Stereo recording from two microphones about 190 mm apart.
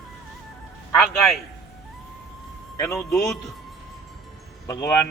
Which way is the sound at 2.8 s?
15° left (ahead or behind).